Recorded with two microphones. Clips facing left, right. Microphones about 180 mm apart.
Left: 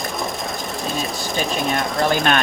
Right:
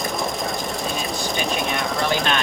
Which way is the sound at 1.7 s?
50° left (ahead or behind).